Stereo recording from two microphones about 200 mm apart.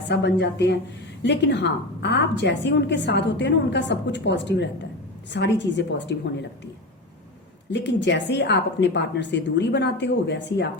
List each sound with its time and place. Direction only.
0.0 s a woman's voice: 60° left (ahead or behind)
7.7 s a woman's voice: 60° left (ahead or behind)